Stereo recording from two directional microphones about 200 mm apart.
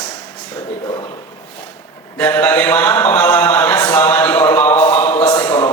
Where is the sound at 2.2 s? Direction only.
10° left (ahead or behind).